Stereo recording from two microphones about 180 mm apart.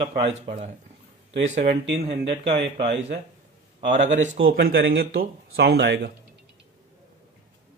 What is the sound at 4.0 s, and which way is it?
Speech, 40° right (ahead or behind).